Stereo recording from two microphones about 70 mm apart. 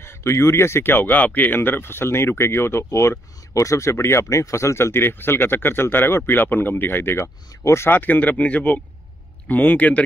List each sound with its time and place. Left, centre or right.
0.0 s speech: left
7.9 s speech: left